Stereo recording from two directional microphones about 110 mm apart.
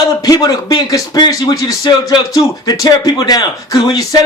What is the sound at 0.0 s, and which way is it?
A man's voice, 35° left (ahead or behind).